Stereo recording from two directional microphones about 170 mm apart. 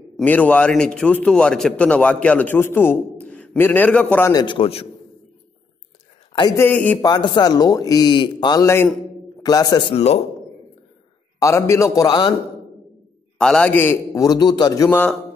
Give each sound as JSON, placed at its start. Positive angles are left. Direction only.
{"t": 0.2, "sound": "a man's voice", "side_deg": 10}
{"t": 4.3, "sound": "speech", "side_deg": 25}
{"t": 6.5, "sound": "a man's voice", "side_deg": 10}
{"t": 7.0, "sound": "speech", "side_deg": 25}
{"t": 11.3, "sound": "speech", "side_deg": 15}
{"t": 13.4, "sound": "a man's voice", "side_deg": 5}